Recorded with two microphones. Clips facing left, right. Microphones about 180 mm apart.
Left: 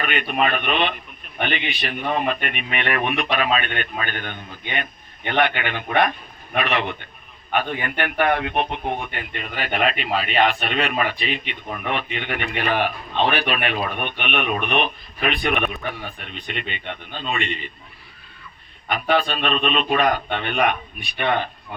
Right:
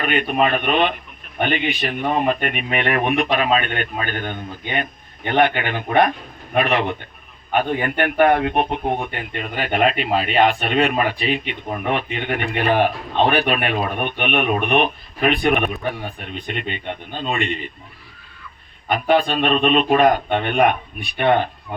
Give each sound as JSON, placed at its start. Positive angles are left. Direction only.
{"t": 0.0, "sound": "speech", "side_deg": -40}
{"t": 18.9, "sound": "speech", "side_deg": -45}